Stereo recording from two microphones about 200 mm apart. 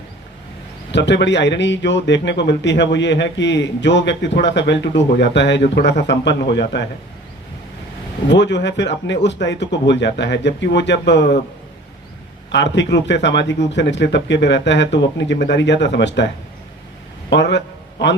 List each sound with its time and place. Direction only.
0.9 s a man's voice: 60° left (ahead or behind)
8.3 s a man's voice: 60° left (ahead or behind)
12.5 s a man's voice: 60° left (ahead or behind)